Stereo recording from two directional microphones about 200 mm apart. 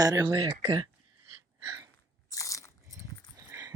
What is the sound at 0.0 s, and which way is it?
Speech, 20° right (ahead or behind).